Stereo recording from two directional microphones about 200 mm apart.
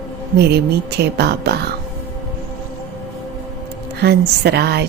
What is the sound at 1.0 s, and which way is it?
Speech, 55° right (ahead or behind).